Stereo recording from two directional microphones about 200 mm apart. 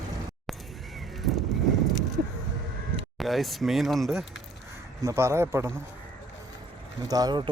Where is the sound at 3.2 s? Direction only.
Centre (ahead or behind).